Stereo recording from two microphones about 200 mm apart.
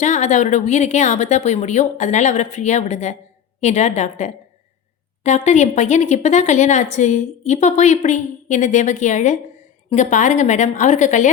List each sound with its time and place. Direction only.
0.0 s a woman's voice: 35° left (ahead or behind)